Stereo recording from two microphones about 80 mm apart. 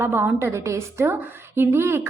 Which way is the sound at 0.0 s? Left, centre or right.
Right.